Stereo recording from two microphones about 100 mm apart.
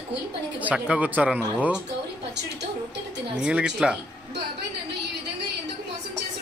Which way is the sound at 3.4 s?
10° right (ahead or behind).